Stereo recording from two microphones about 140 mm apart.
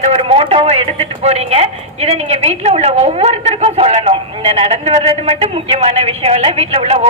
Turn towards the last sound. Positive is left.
turn(degrees=-45)  # may be behind; listen again after turning